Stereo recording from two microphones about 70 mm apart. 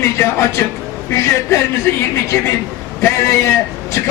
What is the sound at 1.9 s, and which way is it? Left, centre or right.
A man's voice, left.